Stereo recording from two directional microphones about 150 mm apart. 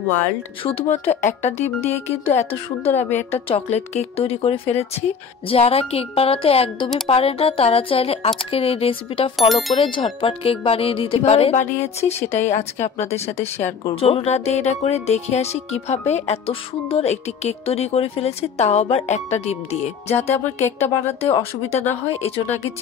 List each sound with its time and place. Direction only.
0.8 s speech: 50° left (ahead or behind)
9.4 s speech: centre (ahead or behind)
9.8 s speech: 35° left (ahead or behind)
20.6 s speech: 15° left (ahead or behind)
21.2 s speech: 40° left (ahead or behind)